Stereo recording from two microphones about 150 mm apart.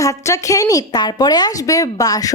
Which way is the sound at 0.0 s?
20° left (ahead or behind).